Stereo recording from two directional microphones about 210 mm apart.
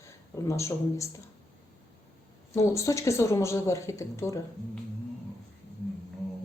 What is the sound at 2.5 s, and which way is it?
A woman's voice, 15° left (ahead or behind).